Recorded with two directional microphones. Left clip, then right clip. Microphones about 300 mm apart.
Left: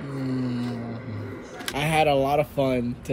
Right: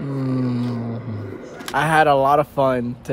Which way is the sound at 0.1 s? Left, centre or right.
Right.